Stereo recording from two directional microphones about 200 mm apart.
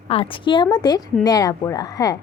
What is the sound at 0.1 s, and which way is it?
A woman's voice, 25° left (ahead or behind).